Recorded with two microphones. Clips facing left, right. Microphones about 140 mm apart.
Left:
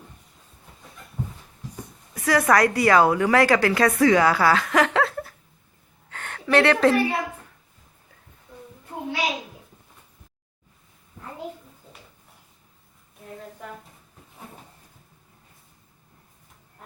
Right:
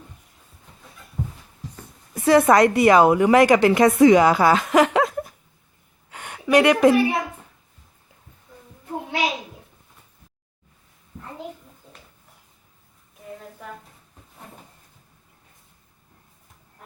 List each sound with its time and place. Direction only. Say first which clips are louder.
2.1 s a woman's voice: right 5 dB; 25° right (ahead or behind)